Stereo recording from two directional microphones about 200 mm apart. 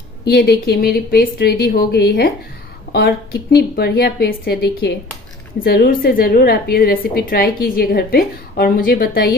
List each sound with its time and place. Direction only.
0.3 s a woman's voice: 55° left (ahead or behind)